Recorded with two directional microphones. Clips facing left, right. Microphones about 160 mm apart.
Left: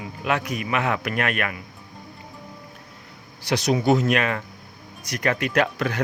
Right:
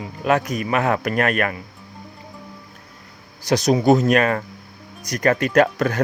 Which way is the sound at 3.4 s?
40° right (ahead or behind).